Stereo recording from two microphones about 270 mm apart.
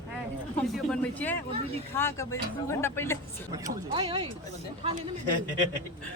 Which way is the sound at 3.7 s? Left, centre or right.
Centre.